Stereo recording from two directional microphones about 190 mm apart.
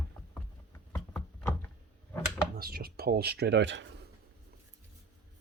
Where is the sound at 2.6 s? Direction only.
50° right (ahead or behind); by 4.0 s 70° right (ahead or behind).